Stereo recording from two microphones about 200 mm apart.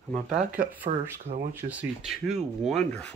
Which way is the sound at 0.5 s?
45° right (ahead or behind).